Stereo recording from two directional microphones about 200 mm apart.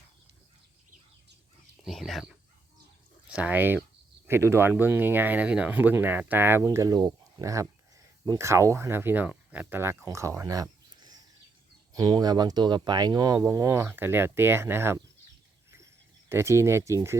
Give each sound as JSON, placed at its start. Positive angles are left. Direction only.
{"t": 1.8, "sound": "speech", "side_deg": 0}
{"t": 16.3, "sound": "speech", "side_deg": -15}